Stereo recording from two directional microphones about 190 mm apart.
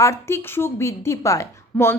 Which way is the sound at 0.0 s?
15° left (ahead or behind).